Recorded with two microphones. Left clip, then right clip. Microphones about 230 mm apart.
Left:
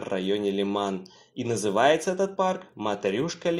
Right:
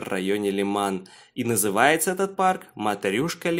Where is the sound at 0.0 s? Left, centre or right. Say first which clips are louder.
Right 2 dB; right.